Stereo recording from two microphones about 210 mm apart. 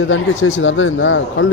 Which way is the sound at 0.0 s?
65° left (ahead or behind).